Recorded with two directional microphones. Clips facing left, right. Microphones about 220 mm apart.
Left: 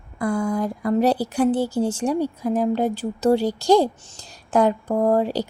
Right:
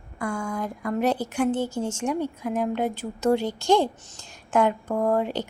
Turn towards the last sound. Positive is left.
turn(degrees=35)  # may be behind; listen again after turning